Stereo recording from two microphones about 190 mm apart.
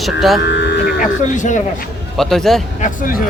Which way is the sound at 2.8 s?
45° left (ahead or behind).